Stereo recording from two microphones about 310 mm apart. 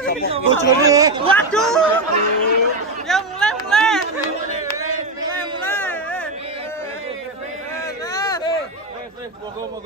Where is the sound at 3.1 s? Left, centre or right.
Centre.